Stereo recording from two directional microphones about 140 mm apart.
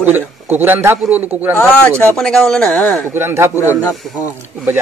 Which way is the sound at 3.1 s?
15° right (ahead or behind).